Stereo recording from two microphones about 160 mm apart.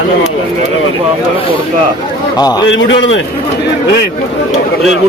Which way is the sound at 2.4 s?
25° left (ahead or behind).